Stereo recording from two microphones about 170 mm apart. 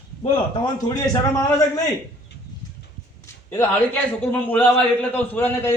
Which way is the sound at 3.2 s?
15° left (ahead or behind).